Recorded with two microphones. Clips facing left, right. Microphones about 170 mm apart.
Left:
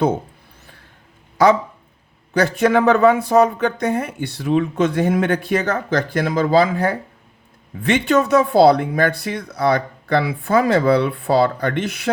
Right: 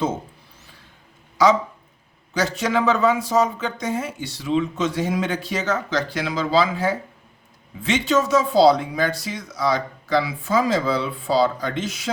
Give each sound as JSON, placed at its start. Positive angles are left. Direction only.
{"t": 1.4, "sound": "speech", "side_deg": 55}